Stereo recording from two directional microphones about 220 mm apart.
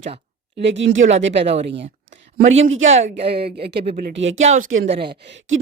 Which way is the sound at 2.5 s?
30° right (ahead or behind).